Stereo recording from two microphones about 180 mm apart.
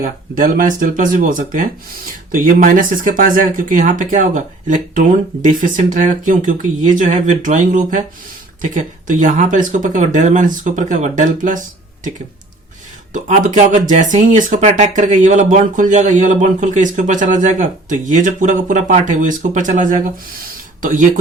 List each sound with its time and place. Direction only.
0.0 s speech: 50° right (ahead or behind)
13.1 s speech: 45° right (ahead or behind)